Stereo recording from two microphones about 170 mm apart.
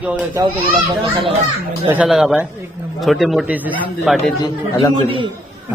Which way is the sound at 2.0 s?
5° right (ahead or behind).